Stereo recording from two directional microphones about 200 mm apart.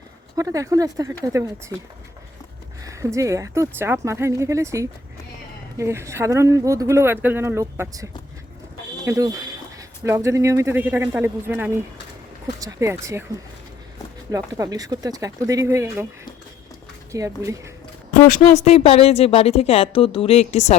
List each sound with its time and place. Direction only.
0.3 s speech: 15° right (ahead or behind)
2.8 s speech: 15° right (ahead or behind)
14.3 s speech: 15° right (ahead or behind)
17.1 s speech: 15° right (ahead or behind)
18.1 s a woman's voice: 35° left (ahead or behind)